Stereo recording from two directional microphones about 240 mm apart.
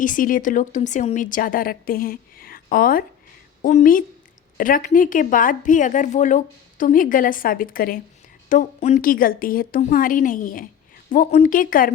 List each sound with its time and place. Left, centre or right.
0.0 s speech: left